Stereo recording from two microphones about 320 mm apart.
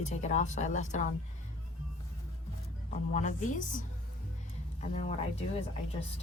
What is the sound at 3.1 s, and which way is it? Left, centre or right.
Speech, left.